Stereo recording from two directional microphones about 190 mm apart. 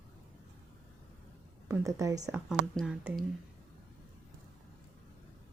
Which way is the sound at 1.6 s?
15° right (ahead or behind).